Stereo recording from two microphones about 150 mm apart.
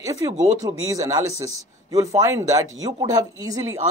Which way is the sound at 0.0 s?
20° right (ahead or behind).